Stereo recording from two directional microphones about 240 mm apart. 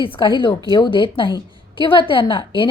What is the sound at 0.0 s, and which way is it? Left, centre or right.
A woman's voice, left.